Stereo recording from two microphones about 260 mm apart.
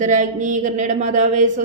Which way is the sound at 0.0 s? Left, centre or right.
Right.